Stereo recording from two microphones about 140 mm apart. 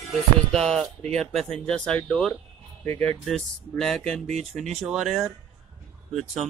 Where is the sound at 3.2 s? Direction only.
5° left (ahead or behind).